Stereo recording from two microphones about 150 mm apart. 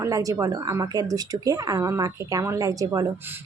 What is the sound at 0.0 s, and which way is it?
A woman's voice, 20° right (ahead or behind).